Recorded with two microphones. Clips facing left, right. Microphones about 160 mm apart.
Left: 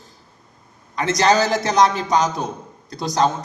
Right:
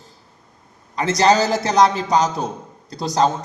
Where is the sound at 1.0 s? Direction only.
30° right (ahead or behind).